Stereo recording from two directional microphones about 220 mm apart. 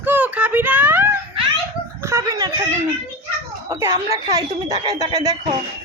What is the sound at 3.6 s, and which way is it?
A woman's voice, 15° right (ahead or behind).